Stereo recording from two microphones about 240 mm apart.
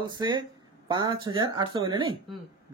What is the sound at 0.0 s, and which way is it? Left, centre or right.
A man's voice, centre.